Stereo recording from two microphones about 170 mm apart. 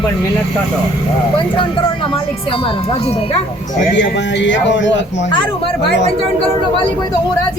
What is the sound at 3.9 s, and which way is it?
Speech, 90° left.